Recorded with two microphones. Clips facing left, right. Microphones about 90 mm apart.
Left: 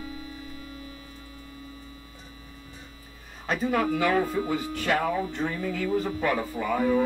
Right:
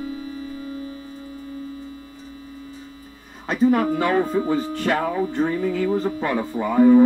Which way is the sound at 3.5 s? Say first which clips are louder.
Right 7 dB; 40° right (ahead or behind).